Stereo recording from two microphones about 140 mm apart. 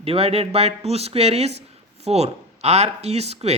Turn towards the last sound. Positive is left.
turn(degrees=-50)  # may be behind; listen again after turning